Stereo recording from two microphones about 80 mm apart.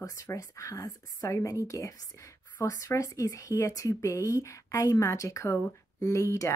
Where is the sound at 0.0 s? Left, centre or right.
Left.